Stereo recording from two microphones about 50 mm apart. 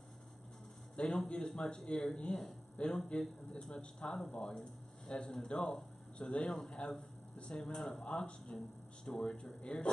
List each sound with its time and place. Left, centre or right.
0.9 s speech: centre